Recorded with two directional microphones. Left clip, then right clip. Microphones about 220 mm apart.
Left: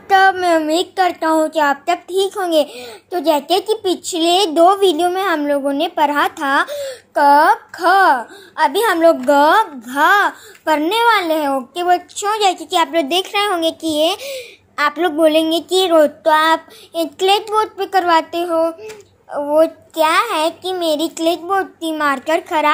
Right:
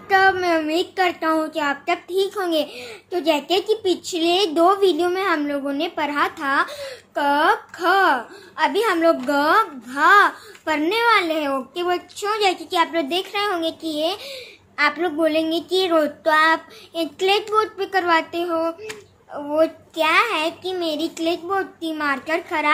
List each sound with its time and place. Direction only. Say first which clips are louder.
0.1 s a woman's voice: left 5 dB; 25° left (ahead or behind)